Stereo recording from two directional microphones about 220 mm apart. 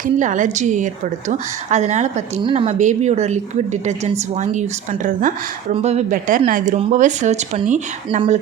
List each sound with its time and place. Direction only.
0.0 s speech: 35° right (ahead or behind)